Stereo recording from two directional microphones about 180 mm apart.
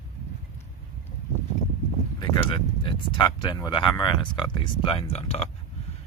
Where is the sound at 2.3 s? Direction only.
25° left (ahead or behind).